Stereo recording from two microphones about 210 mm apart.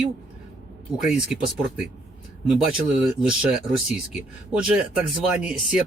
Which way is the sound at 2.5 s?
5° right (ahead or behind).